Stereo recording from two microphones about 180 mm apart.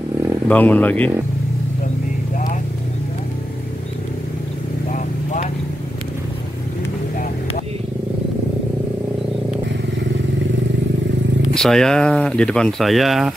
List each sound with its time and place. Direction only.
0.5 s speech: 10° left (ahead or behind)
4.9 s vehicle: 45° left (ahead or behind)
11.5 s speech: 5° left (ahead or behind)